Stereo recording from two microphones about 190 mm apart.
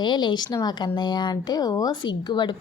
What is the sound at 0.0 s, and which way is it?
Speech, 25° left (ahead or behind).